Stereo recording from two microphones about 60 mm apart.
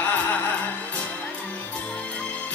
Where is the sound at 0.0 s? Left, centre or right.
Left.